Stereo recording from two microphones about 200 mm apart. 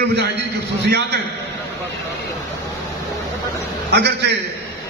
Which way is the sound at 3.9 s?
55° right (ahead or behind).